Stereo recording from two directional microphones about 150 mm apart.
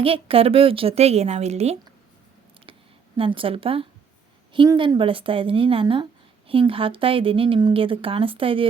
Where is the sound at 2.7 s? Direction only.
35° right (ahead or behind).